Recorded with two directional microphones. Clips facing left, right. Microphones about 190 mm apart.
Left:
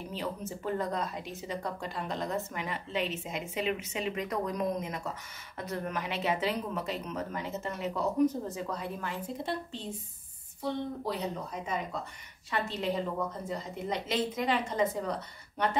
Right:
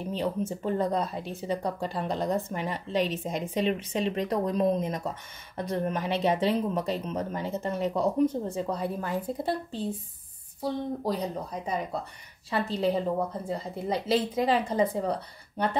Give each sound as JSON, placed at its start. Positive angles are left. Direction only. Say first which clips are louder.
{"t": 0.1, "sound": "a woman's voice", "louder": "right 8 dB", "side_deg": -30}